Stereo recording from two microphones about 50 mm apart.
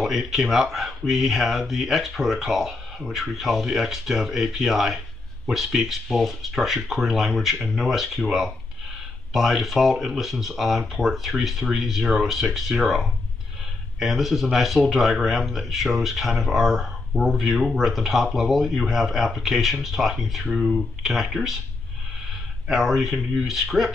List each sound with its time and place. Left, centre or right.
0.0 s speech: centre
22.7 s speech: centre